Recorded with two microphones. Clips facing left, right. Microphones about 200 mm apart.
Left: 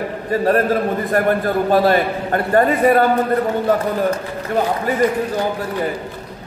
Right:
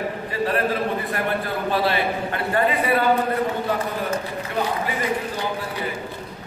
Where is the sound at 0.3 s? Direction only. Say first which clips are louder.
Left 8 dB; 45° left (ahead or behind).